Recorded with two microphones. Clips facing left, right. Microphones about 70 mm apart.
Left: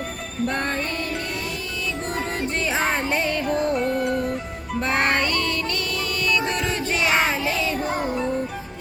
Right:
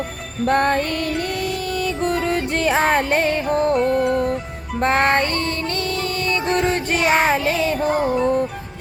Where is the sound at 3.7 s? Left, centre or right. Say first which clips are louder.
Right 5 dB; centre.